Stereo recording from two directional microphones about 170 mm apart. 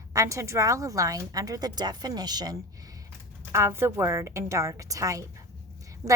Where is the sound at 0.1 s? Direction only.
20° right (ahead or behind).